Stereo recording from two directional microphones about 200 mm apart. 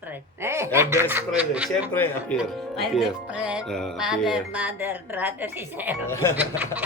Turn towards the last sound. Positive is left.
turn(degrees=-10)  # may be behind; listen again after turning